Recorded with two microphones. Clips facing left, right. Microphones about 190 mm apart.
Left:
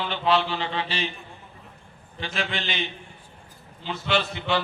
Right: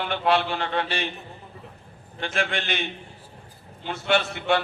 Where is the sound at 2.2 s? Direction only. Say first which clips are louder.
Right 3 dB; 55° right (ahead or behind).